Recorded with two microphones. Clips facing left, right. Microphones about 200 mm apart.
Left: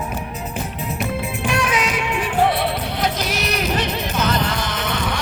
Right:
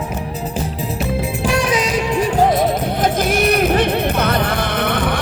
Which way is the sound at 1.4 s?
35° right (ahead or behind).